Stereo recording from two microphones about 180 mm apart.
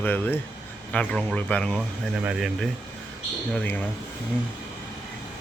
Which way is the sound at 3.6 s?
10° left (ahead or behind).